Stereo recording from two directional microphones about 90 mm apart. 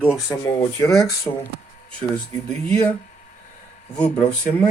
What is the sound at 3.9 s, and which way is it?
Speech, 10° left (ahead or behind).